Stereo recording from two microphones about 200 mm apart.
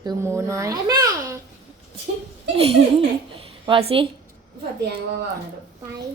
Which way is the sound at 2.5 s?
30° right (ahead or behind).